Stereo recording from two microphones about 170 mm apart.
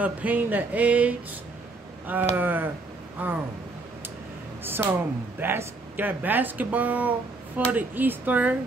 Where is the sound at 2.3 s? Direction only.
10° right (ahead or behind).